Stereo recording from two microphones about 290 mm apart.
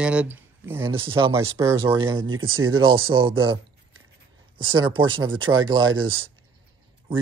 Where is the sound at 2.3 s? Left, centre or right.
Right.